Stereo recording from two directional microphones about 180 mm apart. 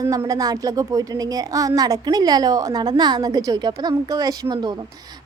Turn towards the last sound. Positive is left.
turn(degrees=-25)  # may be behind; listen again after turning